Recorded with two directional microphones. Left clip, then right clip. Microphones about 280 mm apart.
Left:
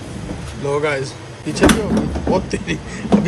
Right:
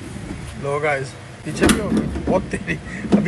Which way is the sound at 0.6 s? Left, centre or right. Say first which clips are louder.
Left 2 dB; centre.